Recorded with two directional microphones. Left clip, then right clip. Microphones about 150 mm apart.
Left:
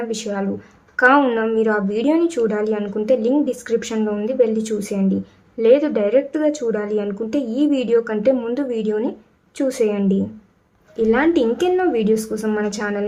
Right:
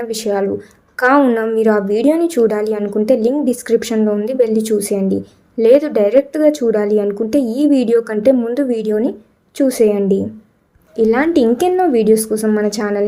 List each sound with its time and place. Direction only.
0.0 s a woman's voice: 35° right (ahead or behind)